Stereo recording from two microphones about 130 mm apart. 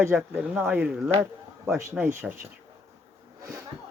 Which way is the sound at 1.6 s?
20° right (ahead or behind).